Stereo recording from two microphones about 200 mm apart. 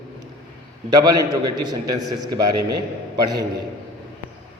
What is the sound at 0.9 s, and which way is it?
A man's voice, 20° right (ahead or behind).